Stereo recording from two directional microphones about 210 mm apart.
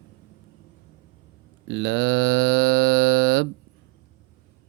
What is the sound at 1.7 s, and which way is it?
Livestock, 60° right (ahead or behind).